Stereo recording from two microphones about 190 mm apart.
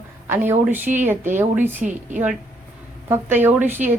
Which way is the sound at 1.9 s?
40° right (ahead or behind).